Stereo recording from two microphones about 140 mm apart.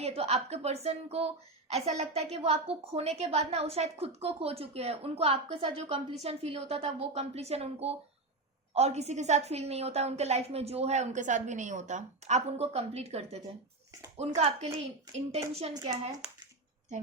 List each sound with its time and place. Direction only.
0.0 s a woman's voice: 45° right (ahead or behind)
15.7 s speech: 30° right (ahead or behind)